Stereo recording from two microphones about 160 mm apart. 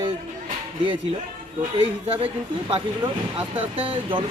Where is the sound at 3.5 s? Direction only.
35° right (ahead or behind).